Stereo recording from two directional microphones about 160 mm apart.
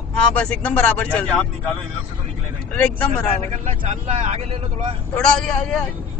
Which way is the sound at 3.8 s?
40° right (ahead or behind).